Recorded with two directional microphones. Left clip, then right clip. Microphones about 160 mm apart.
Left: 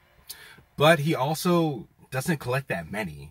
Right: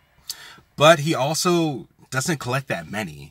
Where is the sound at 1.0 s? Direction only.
20° right (ahead or behind).